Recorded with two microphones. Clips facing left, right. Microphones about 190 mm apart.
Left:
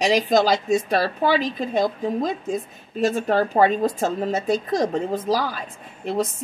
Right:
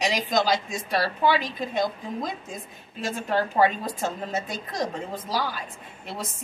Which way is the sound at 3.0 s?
40° left (ahead or behind).